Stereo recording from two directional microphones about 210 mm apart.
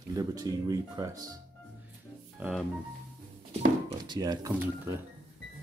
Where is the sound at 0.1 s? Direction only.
15° right (ahead or behind).